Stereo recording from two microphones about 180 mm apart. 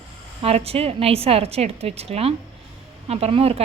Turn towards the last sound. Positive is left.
turn(degrees=-35)  # may be behind; listen again after turning